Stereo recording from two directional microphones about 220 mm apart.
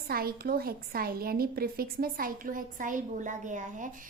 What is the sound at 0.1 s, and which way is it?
A woman's voice, 45° right (ahead or behind).